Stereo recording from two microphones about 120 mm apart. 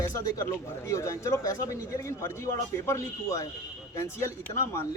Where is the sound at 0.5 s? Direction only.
25° left (ahead or behind).